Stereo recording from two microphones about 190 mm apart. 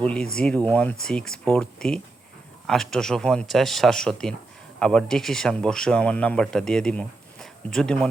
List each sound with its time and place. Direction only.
0.0 s speech: 5° left (ahead or behind)